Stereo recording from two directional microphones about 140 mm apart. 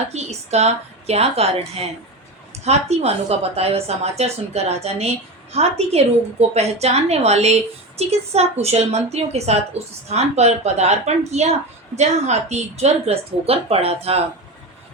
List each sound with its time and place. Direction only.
0.1 s a woman's voice: 50° right (ahead or behind)